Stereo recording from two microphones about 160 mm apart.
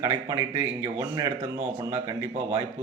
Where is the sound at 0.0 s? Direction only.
25° right (ahead or behind).